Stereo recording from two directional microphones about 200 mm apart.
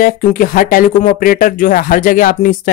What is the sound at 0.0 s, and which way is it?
Speech, 45° left (ahead or behind).